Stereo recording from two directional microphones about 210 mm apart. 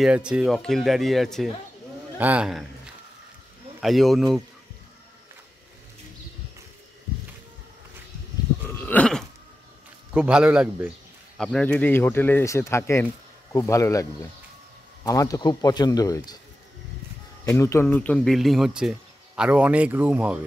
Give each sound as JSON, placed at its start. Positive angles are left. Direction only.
{"t": 0.0, "sound": "a man's voice", "side_deg": -5}
{"t": 3.8, "sound": "speech", "side_deg": 0}
{"t": 8.6, "sound": "burping", "side_deg": 10}
{"t": 10.1, "sound": "speech", "side_deg": -5}
{"t": 15.0, "sound": "speech", "side_deg": 15}
{"t": 17.5, "sound": "speech", "side_deg": 15}